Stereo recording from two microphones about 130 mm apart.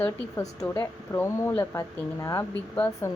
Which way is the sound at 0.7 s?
20° left (ahead or behind).